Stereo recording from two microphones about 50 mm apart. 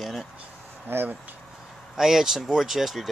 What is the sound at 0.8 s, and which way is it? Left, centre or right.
Speech, right.